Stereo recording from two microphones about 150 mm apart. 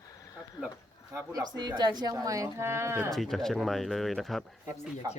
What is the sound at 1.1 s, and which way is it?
Speech, 25° right (ahead or behind).